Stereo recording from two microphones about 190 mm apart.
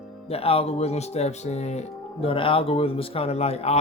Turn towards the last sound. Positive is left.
turn(degrees=35)  # may be behind; listen again after turning